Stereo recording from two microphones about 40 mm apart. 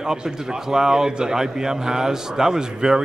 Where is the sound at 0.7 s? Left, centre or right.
Centre.